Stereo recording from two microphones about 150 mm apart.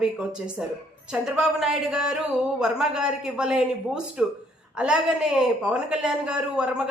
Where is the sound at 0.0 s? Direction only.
5° right (ahead or behind).